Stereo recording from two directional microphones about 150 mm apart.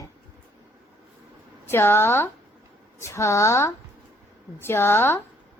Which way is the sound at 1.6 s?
15° left (ahead or behind).